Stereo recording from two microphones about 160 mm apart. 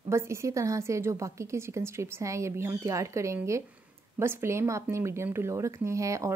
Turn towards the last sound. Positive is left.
turn(degrees=-20)  # may be behind; listen again after turning